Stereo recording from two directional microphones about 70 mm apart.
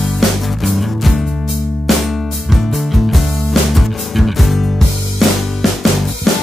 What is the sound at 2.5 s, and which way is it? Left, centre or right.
Music, centre.